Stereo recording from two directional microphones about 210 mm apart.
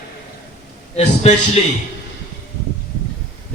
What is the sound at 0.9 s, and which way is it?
Speech, 30° left (ahead or behind).